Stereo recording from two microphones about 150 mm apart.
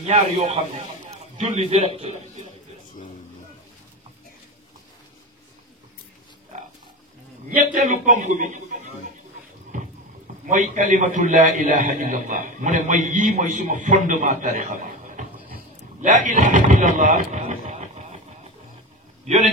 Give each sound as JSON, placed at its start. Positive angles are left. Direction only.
{"t": 0.0, "sound": "a man's voice", "side_deg": -45}
{"t": 2.0, "sound": "a man's voice", "side_deg": -45}
{"t": 7.5, "sound": "a man's voice", "side_deg": -60}
{"t": 10.4, "sound": "a man's voice", "side_deg": -55}
{"t": 19.2, "sound": "a man's voice", "side_deg": -50}